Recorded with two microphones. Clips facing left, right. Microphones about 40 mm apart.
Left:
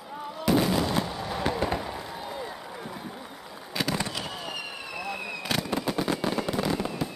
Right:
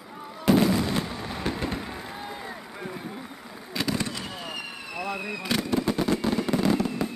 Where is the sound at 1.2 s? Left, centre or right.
Centre.